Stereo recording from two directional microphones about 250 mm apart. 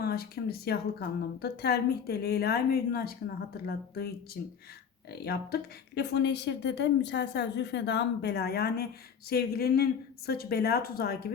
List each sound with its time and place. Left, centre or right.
0.0 s a woman's voice: left